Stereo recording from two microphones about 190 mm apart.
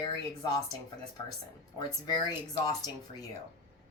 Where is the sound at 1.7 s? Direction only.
25° left (ahead or behind).